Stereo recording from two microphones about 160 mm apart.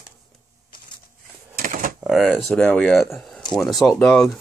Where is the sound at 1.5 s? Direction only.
60° right (ahead or behind).